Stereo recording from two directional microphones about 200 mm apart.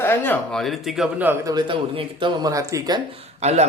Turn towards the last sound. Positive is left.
turn(degrees=-35)  # may be behind; listen again after turning